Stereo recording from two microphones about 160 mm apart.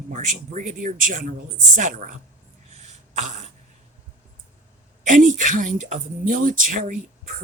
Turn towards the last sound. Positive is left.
turn(degrees=-50)  # may be behind; listen again after turning